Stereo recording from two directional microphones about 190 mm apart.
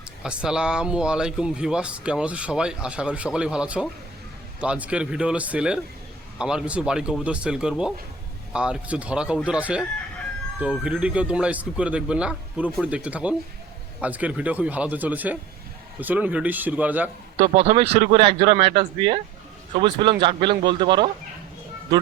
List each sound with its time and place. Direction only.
0.2 s speech: 5° right (ahead or behind)
17.4 s speech: 35° right (ahead or behind)